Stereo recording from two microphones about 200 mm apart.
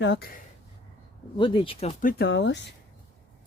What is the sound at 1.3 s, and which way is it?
Speech, 25° left (ahead or behind).